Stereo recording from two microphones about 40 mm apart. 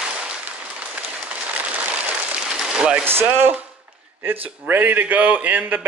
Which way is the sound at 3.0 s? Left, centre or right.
Right.